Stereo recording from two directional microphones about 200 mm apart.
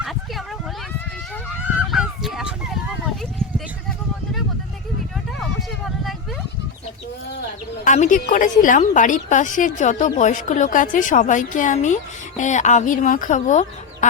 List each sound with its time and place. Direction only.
0.0 s a sound: centre (ahead or behind)
1.9 s honk: centre (ahead or behind)
7.9 s a woman's voice: 40° left (ahead or behind)